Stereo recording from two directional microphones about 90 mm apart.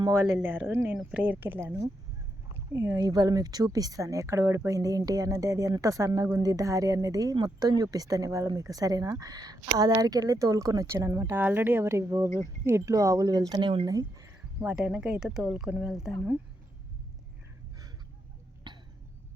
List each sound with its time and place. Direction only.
0.4 s speech: 20° right (ahead or behind)
2.7 s speech: 30° right (ahead or behind)
3.0 s speech: 45° right (ahead or behind)
11.3 s speech: 20° right (ahead or behind); by 13.8 s 60° right (ahead or behind)
13.8 s speech: 40° right (ahead or behind)
14.6 s speech: 10° right (ahead or behind)
18.7 s a sound: 55° right (ahead or behind)